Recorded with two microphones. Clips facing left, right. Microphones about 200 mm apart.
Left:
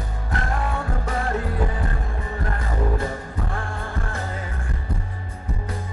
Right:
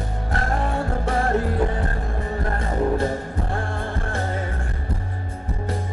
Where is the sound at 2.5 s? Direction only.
35° right (ahead or behind).